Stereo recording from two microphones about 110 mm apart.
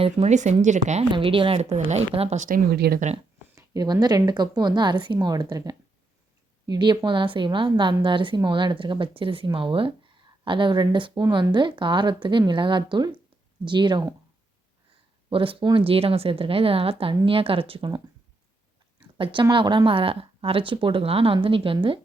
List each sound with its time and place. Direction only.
0.0 s speech: 80° right
1.1 s a woman's voice: 50° right (ahead or behind); by 2.5 s 80° right
3.5 s a sound: 35° right (ahead or behind)
4.0 s a woman's voice: 40° right (ahead or behind)
15.3 s a woman's voice: 55° right (ahead or behind)
19.1 s speech: 50° right (ahead or behind)